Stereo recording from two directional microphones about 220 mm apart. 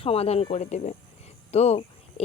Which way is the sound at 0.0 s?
25° left (ahead or behind).